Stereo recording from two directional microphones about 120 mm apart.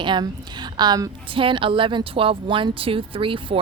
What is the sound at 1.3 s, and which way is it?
Speech, 45° right (ahead or behind).